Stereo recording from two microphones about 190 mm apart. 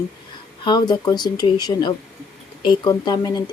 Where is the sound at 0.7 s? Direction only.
20° left (ahead or behind).